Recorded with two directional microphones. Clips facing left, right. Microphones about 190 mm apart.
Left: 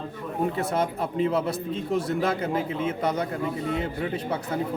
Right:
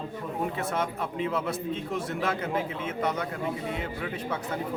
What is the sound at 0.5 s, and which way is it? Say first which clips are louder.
Speech: left 4 dB; 35° left (ahead or behind).